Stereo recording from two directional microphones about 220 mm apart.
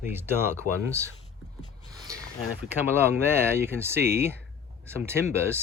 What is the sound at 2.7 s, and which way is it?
Speech, 10° right (ahead or behind).